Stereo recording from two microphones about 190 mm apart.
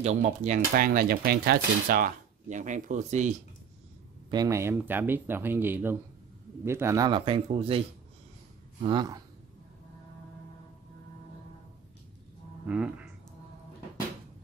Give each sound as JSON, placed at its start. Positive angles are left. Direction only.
{"t": 0.0, "sound": "speech", "side_deg": -35}
{"t": 4.3, "sound": "a man's voice", "side_deg": -20}
{"t": 8.8, "sound": "a man's voice", "side_deg": -20}
{"t": 12.6, "sound": "speech", "side_deg": -5}